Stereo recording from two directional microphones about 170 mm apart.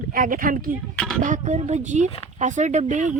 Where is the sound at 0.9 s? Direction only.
Centre (ahead or behind).